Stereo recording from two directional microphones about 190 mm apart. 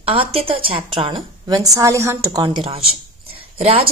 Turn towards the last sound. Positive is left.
turn(degrees=-30)  # may be behind; listen again after turning